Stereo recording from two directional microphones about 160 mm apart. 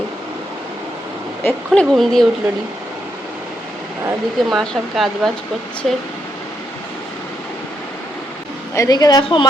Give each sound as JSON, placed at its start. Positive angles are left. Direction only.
{"t": 1.5, "sound": "speech", "side_deg": 5}
{"t": 4.4, "sound": "speech", "side_deg": 0}
{"t": 8.7, "sound": "a woman's voice", "side_deg": 20}